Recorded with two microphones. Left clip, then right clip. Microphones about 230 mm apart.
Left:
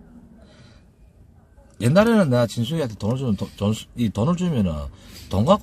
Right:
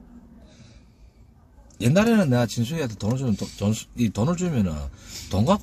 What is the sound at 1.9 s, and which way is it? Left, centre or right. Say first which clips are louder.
Speech: left 3 dB; centre.